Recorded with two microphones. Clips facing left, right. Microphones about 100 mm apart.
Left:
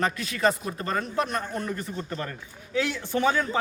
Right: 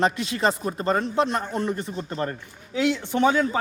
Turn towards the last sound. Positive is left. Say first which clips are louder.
# right 4 dB
turn(degrees=-20)  # may be behind; listen again after turning